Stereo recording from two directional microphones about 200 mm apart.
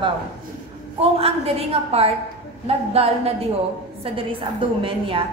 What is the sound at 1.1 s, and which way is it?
A woman's voice, 30° right (ahead or behind).